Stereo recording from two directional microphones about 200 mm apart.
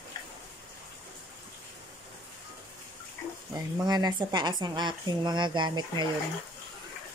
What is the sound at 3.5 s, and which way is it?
Speech, 20° right (ahead or behind).